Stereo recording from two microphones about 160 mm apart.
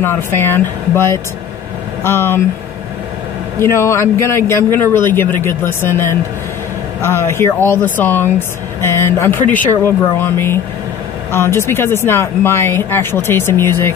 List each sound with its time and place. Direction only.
0.0 s a man's voice: 15° left (ahead or behind)
3.5 s a man's voice: 15° left (ahead or behind)